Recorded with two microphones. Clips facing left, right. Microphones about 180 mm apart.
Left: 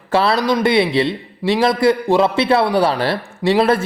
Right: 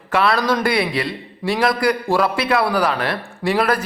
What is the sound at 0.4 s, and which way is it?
A man's voice, 20° left (ahead or behind).